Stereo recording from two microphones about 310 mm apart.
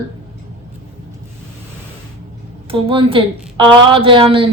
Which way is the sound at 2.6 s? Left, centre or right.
Centre.